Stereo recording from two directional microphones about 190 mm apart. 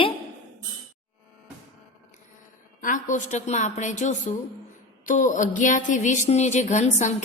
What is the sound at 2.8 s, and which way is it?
A woman's voice, 40° left (ahead or behind).